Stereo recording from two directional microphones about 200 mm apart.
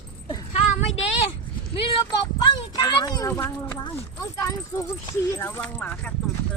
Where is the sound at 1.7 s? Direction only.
25° left (ahead or behind); by 6.1 s 5° left (ahead or behind).